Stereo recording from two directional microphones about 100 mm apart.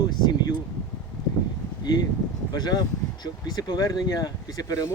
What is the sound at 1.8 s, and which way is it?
Speech, 40° left (ahead or behind).